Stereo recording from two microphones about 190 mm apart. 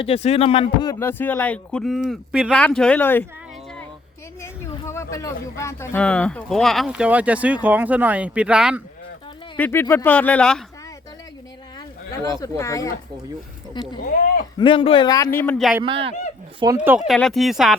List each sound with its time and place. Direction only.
0.0 s speech: 30° left (ahead or behind); by 3.2 s 10° left (ahead or behind)
4.4 s speech: 15° left (ahead or behind); by 8.8 s 5° right (ahead or behind)
9.6 s speech: 10° left (ahead or behind)
12.1 s speech: 20° left (ahead or behind); by 15.8 s centre (ahead or behind)
15.8 s speech: 30° right (ahead or behind)
16.7 s speech: 10° right (ahead or behind)